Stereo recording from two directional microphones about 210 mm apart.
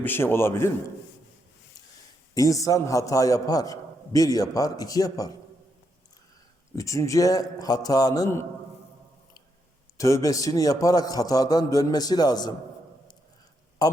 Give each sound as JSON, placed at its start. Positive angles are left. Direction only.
{"t": 0.0, "sound": "a man's voice", "side_deg": 10}
{"t": 2.3, "sound": "a man's voice", "side_deg": 15}
{"t": 6.7, "sound": "a man's voice", "side_deg": 15}
{"t": 10.0, "sound": "a man's voice", "side_deg": 15}
{"t": 13.8, "sound": "a sound", "side_deg": 20}